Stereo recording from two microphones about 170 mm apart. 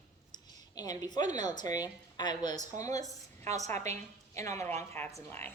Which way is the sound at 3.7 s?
40° right (ahead or behind).